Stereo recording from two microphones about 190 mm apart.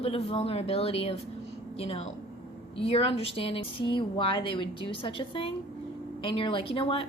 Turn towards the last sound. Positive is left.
turn(degrees=25)  # may be behind; listen again after turning